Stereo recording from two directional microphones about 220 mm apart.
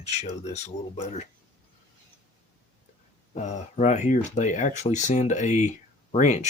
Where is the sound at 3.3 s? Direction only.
30° left (ahead or behind).